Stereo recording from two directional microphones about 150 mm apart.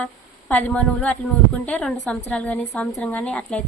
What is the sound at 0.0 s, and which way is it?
A woman's voice, 10° left (ahead or behind).